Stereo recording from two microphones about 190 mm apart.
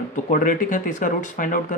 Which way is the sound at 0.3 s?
45° left (ahead or behind).